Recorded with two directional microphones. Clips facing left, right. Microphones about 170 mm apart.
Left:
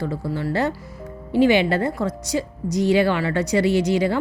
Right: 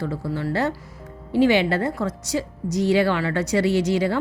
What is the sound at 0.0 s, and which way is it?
Speech, 15° left (ahead or behind).